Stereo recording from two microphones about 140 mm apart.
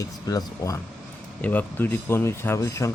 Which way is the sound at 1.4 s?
15° left (ahead or behind).